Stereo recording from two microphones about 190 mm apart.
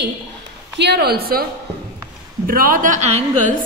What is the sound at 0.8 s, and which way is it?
Speech, 60° right (ahead or behind).